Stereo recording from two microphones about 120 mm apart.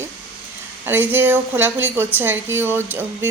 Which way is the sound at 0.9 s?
15° right (ahead or behind).